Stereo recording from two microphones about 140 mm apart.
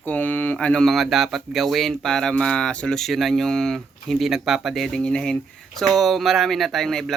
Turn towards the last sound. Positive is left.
turn(degrees=0)  # may be behind; listen again after turning